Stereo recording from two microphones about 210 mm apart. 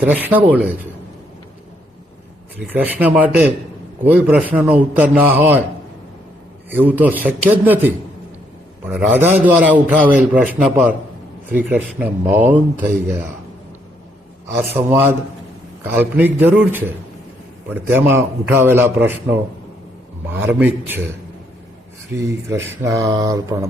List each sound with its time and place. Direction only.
0.0 s a man's voice: 10° right (ahead or behind)
2.6 s a man's voice: 10° right (ahead or behind)
6.7 s a man's voice: 10° right (ahead or behind)
11.9 s a man's voice: 10° right (ahead or behind)
14.6 s a man's voice: 10° right (ahead or behind)
20.5 s a man's voice: 10° right (ahead or behind)
22.1 s a man's voice: 15° right (ahead or behind)